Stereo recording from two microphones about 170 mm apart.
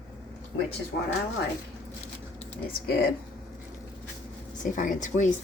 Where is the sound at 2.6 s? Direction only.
65° left (ahead or behind).